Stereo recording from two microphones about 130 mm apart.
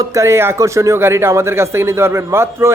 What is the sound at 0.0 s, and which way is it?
Speech, 25° right (ahead or behind).